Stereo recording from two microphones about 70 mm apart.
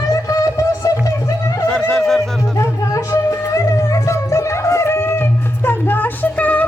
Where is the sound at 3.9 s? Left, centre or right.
Left.